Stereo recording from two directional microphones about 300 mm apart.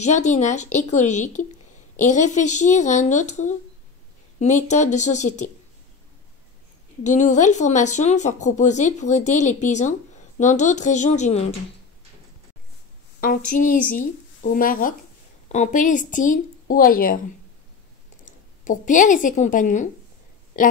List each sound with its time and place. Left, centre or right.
0.0 s speech: left
7.0 s speech: left
13.5 s speech: left
18.2 s a woman's voice: left